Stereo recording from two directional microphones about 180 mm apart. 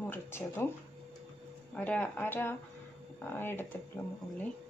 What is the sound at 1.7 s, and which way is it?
Speech, 10° left (ahead or behind).